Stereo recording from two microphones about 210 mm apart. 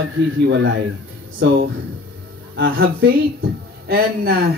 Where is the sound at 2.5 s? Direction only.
60° right (ahead or behind).